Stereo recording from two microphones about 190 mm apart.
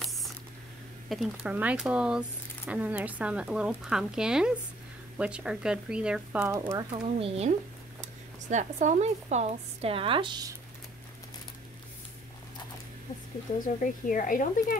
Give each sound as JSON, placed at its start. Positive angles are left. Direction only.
{"t": 0.0, "sound": "spray", "side_deg": 0}
{"t": 1.0, "sound": "speech", "side_deg": 0}
{"t": 6.5, "sound": "speech", "side_deg": -15}
{"t": 6.9, "sound": "speech", "side_deg": -30}
{"t": 14.1, "sound": "speech", "side_deg": 45}